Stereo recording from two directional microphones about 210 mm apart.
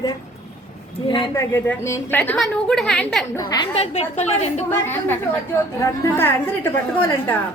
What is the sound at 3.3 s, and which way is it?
Speech, 20° left (ahead or behind).